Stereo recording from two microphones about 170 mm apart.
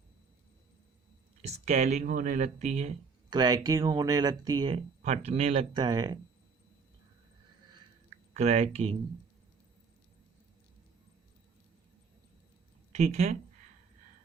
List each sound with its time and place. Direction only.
1.4 s speech: 40° right (ahead or behind)
3.2 s speech: 25° right (ahead or behind)
5.0 s speech: 40° right (ahead or behind)
5.7 s speech: 25° right (ahead or behind)
8.3 s speech: 40° right (ahead or behind)
12.9 s speech: 40° right (ahead or behind)